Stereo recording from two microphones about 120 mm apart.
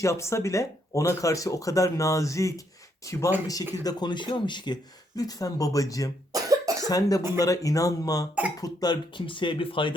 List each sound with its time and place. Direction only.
0.0 s speech: 25° left (ahead or behind)
6.3 s cough: 30° right (ahead or behind)
6.8 s speech: 30° left (ahead or behind)